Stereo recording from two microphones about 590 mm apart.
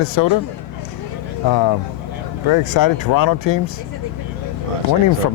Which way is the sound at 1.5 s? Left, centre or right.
Left.